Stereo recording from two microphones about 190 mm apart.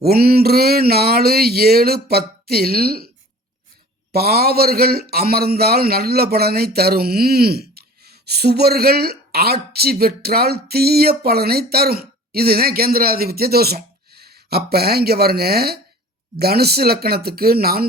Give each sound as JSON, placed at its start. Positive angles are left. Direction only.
{"t": 0.0, "sound": "a man's voice", "side_deg": -55}
{"t": 4.1, "sound": "a man's voice", "side_deg": -55}